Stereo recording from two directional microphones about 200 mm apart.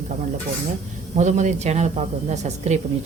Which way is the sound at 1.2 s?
35° right (ahead or behind).